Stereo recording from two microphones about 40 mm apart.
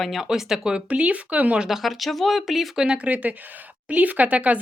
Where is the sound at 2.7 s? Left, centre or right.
Right.